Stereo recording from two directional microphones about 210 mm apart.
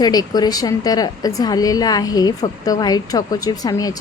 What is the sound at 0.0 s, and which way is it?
Speech, 20° left (ahead or behind).